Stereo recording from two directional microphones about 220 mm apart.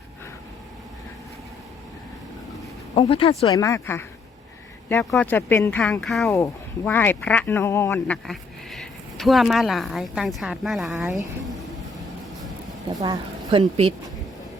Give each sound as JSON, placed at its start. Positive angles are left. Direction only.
{"t": 2.9, "sound": "speech", "side_deg": 25}
{"t": 6.3, "sound": "speech", "side_deg": 10}
{"t": 12.9, "sound": "speech", "side_deg": -15}